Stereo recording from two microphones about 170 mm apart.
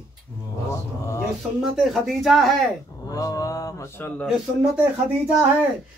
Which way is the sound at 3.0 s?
20° left (ahead or behind).